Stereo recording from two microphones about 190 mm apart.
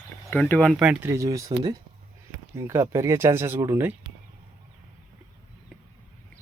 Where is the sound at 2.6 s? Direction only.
15° right (ahead or behind).